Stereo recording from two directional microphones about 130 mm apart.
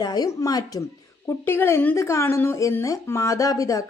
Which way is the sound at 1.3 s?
15° left (ahead or behind).